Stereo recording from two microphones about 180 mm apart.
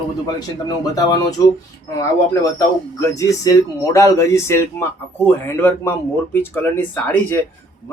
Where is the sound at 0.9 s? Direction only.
20° left (ahead or behind).